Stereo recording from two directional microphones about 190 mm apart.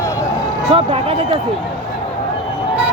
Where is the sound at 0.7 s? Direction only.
30° right (ahead or behind).